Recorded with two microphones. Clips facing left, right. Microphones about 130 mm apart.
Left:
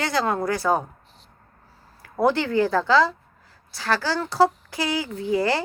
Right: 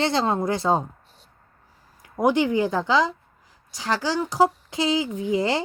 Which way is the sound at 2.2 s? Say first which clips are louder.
Even; 15° right (ahead or behind).